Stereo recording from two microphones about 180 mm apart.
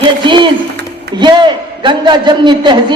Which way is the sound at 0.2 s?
25° right (ahead or behind).